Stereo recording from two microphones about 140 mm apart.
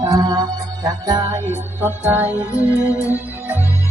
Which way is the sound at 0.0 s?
30° right (ahead or behind).